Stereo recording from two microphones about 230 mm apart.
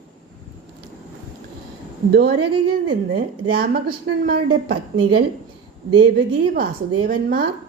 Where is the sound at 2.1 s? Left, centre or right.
Right.